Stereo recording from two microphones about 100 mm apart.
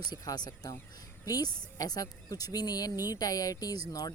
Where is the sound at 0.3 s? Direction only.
40° left (ahead or behind).